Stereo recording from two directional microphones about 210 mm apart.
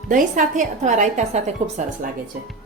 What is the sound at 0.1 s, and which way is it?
A woman's voice, 40° right (ahead or behind).